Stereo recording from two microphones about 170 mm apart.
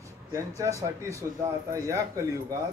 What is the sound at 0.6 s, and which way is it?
A man's voice, 20° right (ahead or behind).